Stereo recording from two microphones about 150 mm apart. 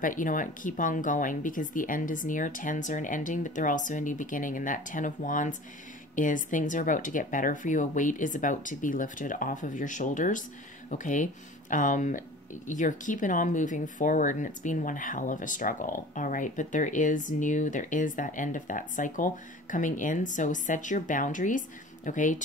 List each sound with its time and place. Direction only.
0.0 s speech: 60° left (ahead or behind)